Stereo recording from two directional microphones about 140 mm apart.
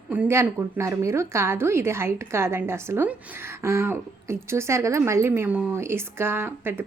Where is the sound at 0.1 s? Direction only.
15° right (ahead or behind).